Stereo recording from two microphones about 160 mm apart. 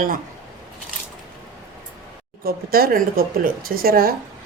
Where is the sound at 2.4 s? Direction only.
70° right (ahead or behind).